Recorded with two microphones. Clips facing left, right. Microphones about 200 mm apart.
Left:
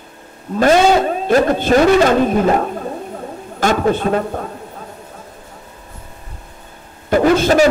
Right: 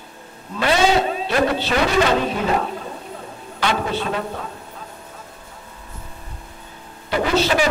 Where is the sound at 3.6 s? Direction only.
45° left (ahead or behind).